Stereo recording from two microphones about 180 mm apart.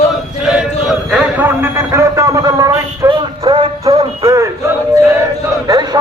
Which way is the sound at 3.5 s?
30° right (ahead or behind).